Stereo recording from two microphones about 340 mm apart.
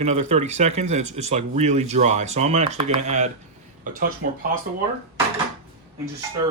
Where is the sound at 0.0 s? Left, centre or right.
Centre.